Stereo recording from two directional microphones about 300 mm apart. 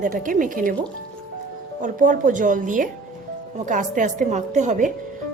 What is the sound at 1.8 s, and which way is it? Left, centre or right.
A woman's voice, right.